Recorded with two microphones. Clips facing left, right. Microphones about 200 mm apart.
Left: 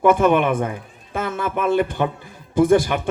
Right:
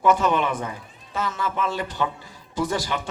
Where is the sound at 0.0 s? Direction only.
55° left (ahead or behind).